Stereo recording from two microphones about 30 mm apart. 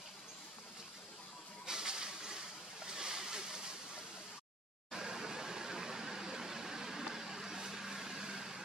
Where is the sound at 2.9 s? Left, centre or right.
Right.